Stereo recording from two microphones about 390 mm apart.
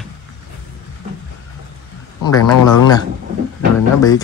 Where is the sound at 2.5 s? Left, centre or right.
Left.